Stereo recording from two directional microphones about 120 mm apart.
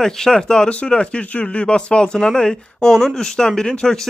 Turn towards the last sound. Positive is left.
turn(degrees=5)  # may be behind; listen again after turning